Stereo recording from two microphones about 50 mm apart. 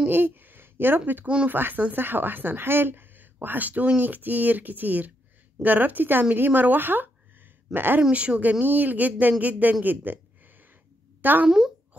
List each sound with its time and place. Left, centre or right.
0.1 s speech: right
1.2 s speech: right
1.5 s speech: right
8.1 s speech: right
11.4 s speech: centre